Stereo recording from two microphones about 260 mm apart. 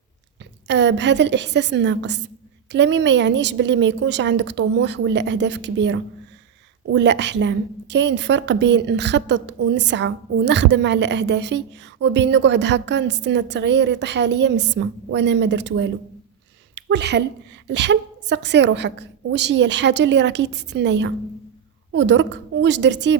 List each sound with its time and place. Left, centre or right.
0.7 s a woman's voice: right